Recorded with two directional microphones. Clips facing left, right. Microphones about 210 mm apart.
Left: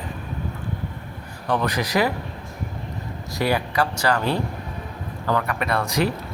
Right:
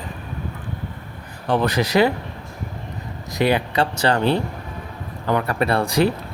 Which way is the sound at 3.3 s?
20° right (ahead or behind).